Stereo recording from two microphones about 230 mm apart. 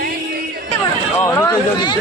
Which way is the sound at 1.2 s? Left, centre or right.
Centre.